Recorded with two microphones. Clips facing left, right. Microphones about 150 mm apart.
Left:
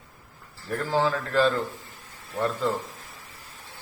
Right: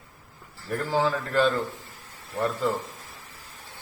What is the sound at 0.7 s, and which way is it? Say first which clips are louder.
A man's voice: even; centre (ahead or behind).